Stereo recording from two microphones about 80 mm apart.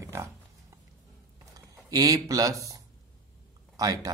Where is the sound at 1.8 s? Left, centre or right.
Right.